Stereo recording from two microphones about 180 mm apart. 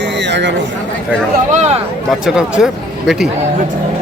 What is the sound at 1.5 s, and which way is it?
Speech, 40° right (ahead or behind).